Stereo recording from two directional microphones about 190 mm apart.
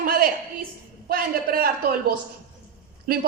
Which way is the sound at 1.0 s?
50° right (ahead or behind).